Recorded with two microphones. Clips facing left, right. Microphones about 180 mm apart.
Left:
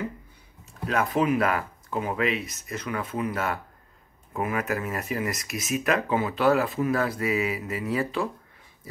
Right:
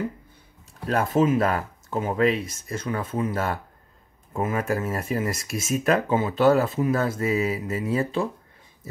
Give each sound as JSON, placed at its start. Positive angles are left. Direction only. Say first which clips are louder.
{"t": 0.8, "sound": "speech", "louder": "right 3 dB", "side_deg": -30}